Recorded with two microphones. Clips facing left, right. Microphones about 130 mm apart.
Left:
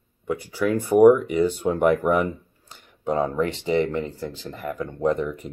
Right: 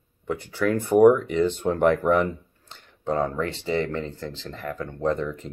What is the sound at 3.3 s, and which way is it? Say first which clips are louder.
Speech: left 3 dB; 20° left (ahead or behind).